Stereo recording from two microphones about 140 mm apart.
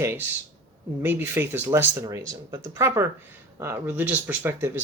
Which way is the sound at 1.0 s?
15° right (ahead or behind).